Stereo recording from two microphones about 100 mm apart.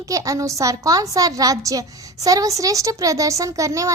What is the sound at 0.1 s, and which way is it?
A woman's voice, 35° right (ahead or behind).